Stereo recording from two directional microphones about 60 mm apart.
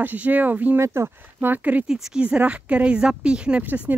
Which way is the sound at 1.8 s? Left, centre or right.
Centre.